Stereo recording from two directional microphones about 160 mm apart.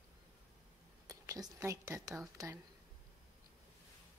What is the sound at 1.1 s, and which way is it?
A woman's voice, 20° right (ahead or behind).